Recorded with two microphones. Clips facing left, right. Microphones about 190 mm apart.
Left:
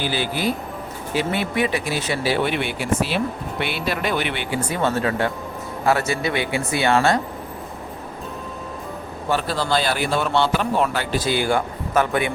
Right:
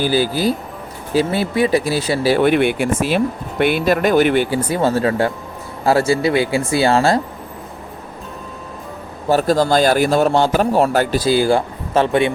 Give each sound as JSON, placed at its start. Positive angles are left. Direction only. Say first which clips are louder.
{"t": 0.0, "sound": "a man's voice", "louder": "right 6 dB", "side_deg": -40}
{"t": 9.3, "sound": "a man's voice", "louder": "right 7 dB", "side_deg": -45}